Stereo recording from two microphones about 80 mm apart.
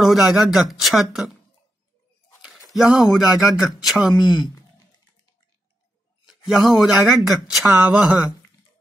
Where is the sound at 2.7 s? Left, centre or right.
Centre.